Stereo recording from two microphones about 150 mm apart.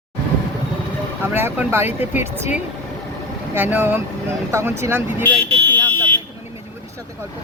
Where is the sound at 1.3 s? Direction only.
15° right (ahead or behind).